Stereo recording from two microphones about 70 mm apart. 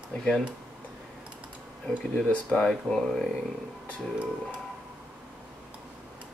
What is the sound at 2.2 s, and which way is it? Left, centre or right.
Speech, centre.